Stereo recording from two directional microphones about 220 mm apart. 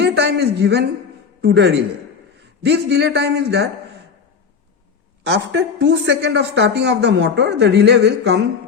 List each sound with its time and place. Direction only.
0.0 s a sound: 50° right (ahead or behind)
1.4 s a man's voice: 50° right (ahead or behind)
5.3 s speech: 50° right (ahead or behind)